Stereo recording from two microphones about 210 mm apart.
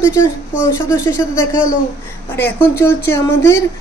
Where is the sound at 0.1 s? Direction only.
10° left (ahead or behind).